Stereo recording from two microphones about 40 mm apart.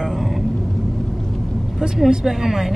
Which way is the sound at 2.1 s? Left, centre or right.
Centre.